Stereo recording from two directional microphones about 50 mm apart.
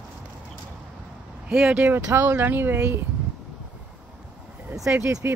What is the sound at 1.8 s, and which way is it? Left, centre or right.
Speech, right.